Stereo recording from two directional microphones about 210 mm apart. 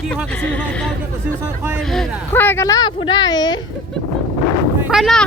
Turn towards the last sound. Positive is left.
turn(degrees=0)  # may be behind; listen again after turning